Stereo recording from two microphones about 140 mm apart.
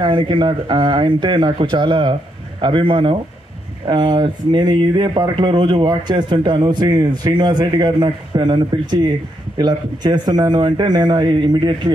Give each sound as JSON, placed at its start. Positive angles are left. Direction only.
{"t": 0.0, "sound": "speech", "side_deg": -35}